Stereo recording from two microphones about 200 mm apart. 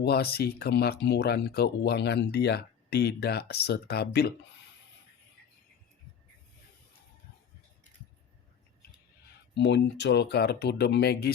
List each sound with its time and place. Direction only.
0.0 s speech: 50° left (ahead or behind)
9.6 s speech: 60° left (ahead or behind)